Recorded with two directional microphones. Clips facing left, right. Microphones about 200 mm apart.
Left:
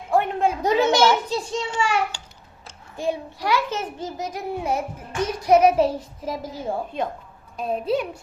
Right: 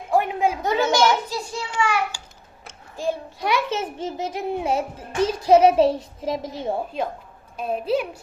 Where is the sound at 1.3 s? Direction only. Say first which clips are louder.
Left 4 dB; 25° left (ahead or behind).